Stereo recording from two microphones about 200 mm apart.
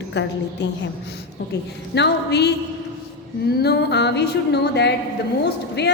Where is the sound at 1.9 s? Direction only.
55° left (ahead or behind).